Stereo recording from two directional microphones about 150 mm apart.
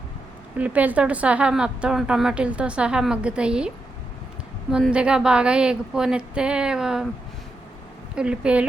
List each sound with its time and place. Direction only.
0.5 s a woman's voice: 10° right (ahead or behind)
4.7 s a woman's voice: 5° right (ahead or behind)
8.1 s a woman's voice: 5° right (ahead or behind)